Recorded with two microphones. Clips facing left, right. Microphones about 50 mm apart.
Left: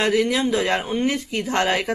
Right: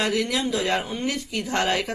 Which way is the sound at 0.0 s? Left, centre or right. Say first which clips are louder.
Left 4 dB; left.